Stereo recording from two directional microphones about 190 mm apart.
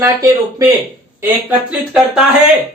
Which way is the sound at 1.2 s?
5° right (ahead or behind).